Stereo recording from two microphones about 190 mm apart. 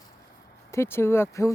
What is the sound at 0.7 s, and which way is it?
Speech, 15° left (ahead or behind).